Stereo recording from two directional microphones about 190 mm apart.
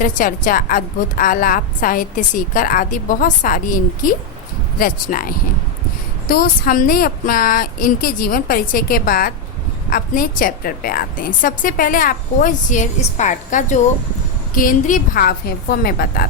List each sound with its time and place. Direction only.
0.0 s a woman's voice: 45° left (ahead or behind)